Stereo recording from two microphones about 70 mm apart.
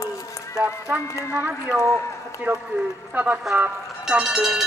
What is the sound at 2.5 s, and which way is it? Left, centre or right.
Speech, right.